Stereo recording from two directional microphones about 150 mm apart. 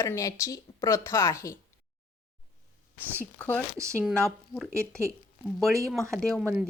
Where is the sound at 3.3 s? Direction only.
10° left (ahead or behind).